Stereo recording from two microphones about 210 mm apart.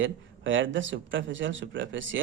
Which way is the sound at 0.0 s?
65° right (ahead or behind).